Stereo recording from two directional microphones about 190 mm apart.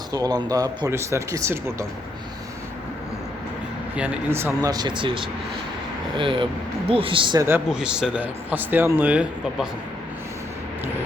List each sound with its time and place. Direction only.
0.1 s speech: 20° right (ahead or behind)
3.9 s speech: 10° right (ahead or behind); by 7.4 s 25° right (ahead or behind)
7.4 s speech: 10° right (ahead or behind)